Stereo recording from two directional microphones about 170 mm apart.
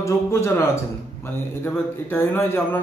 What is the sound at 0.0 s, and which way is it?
A man's voice, 15° left (ahead or behind).